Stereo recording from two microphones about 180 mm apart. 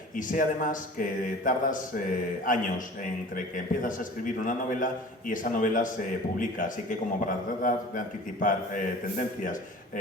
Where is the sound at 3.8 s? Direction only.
45° left (ahead or behind).